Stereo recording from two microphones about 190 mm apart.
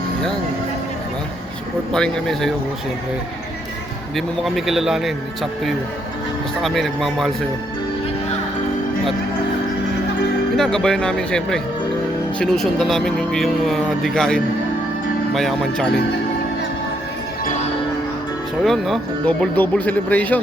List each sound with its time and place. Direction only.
1.9 s speech: 5° left (ahead or behind)
4.1 s speech: centre (ahead or behind)
10.6 s speech: 5° left (ahead or behind)
17.4 s music: 40° left (ahead or behind)
18.6 s speech: centre (ahead or behind)